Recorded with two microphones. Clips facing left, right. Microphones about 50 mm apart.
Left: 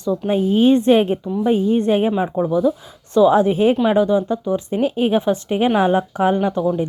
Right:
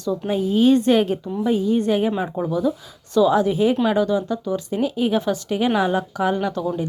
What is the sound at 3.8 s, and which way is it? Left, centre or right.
Speech, left.